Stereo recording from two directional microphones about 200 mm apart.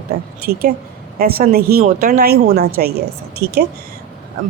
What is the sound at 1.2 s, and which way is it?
Speech, 50° right (ahead or behind).